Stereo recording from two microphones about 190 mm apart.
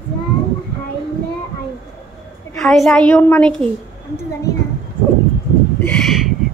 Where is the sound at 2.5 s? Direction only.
5° left (ahead or behind).